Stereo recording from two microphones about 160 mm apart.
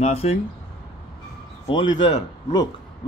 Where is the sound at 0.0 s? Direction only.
40° left (ahead or behind).